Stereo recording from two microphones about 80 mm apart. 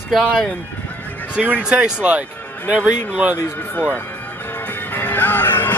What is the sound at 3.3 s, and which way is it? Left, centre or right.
Music, left.